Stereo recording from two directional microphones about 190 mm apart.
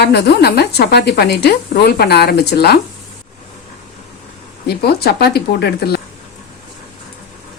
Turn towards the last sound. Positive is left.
turn(degrees=60)  # may be behind; listen again after turning